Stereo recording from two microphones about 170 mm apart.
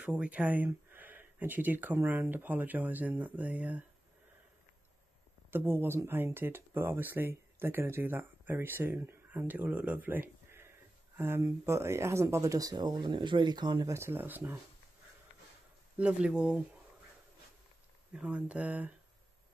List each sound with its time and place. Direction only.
0.0 s speech: 10° right (ahead or behind)
5.5 s speech: 10° right (ahead or behind)
16.0 s speech: 5° right (ahead or behind)
18.2 s speech: 10° right (ahead or behind)